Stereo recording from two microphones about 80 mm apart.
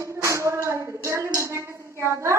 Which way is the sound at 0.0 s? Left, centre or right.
Right.